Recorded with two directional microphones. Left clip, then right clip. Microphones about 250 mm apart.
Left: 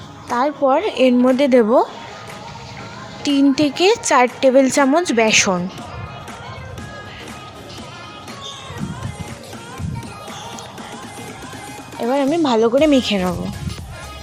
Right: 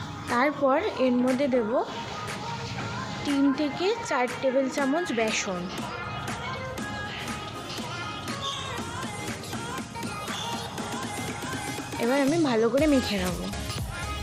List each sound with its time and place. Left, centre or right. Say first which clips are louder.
0.3 s speech: left 7 dB; centre; by 1.8 s left
3.2 s speech: left 10 dB; left
12.1 s speech: left 8 dB; left